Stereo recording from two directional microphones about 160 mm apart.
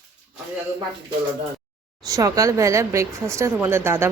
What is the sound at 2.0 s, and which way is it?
Speech, 20° right (ahead or behind).